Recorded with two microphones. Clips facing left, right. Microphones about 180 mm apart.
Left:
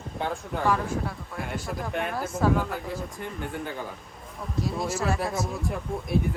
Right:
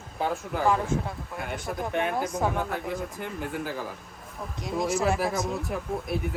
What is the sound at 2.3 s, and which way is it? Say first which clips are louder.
Speech: left 3 dB; 15° right (ahead or behind).